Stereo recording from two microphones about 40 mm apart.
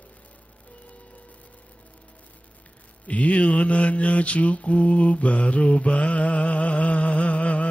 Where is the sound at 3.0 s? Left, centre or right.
Left.